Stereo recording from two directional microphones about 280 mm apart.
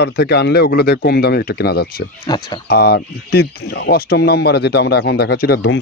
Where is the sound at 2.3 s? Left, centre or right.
Centre.